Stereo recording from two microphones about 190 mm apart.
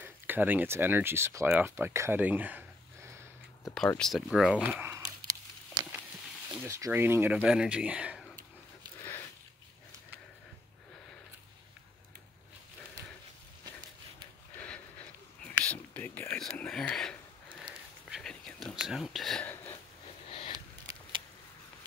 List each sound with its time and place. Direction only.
0.0 s speech: 10° right (ahead or behind)
3.7 s speech: 5° left (ahead or behind)
6.5 s speech: 15° right (ahead or behind)
15.4 s whispering: 5° left (ahead or behind)
18.1 s whispering: 5° left (ahead or behind)
20.2 s a sound: 30° left (ahead or behind)
20.5 s a sound: 20° right (ahead or behind)